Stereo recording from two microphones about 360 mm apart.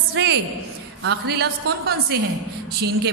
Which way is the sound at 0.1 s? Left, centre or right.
Right.